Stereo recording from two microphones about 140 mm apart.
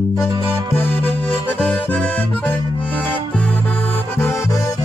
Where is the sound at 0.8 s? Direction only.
10° left (ahead or behind).